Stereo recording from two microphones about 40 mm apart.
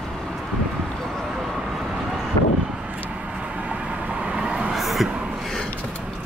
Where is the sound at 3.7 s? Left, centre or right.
Right.